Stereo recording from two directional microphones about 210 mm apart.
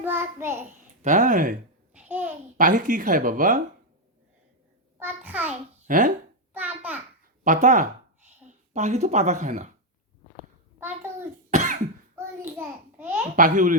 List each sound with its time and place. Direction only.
0.0 s child singing: 10° right (ahead or behind)
1.0 s speech: 35° right (ahead or behind)
2.0 s a sound: 10° right (ahead or behind)
2.6 s speech: 40° right (ahead or behind)
4.9 s a sound: 10° right (ahead or behind)
5.9 s speech: 40° right (ahead or behind)
6.5 s a sound: 10° right (ahead or behind)
7.4 s speech: 35° right (ahead or behind)
11.5 s cough: 35° right (ahead or behind)
12.1 s a child's voice: 10° right (ahead or behind)
13.3 s speech: 40° right (ahead or behind)